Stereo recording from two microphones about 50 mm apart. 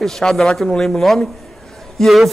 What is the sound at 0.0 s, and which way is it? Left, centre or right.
Speech, centre.